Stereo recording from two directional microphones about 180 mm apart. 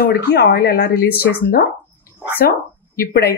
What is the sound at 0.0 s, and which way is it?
Speech, 60° left (ahead or behind).